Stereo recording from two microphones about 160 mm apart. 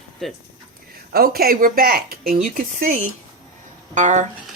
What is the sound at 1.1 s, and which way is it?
Speech, 70° right (ahead or behind).